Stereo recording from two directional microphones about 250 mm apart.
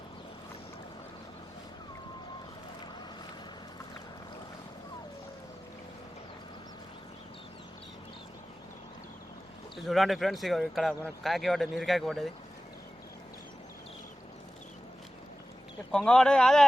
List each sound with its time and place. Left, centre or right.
9.7 s speech: centre
15.9 s speech: centre